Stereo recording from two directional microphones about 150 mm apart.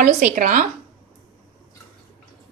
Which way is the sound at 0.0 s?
65° right (ahead or behind).